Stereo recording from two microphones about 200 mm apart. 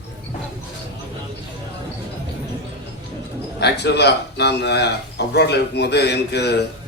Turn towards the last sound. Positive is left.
turn(degrees=55)  # may be behind; listen again after turning